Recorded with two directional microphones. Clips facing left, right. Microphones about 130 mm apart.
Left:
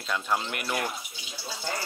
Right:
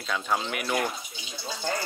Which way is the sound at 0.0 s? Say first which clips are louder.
Right 1 dB; centre (ahead or behind).